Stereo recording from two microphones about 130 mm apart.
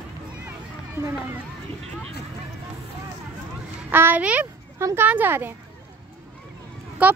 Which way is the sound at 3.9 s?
15° right (ahead or behind).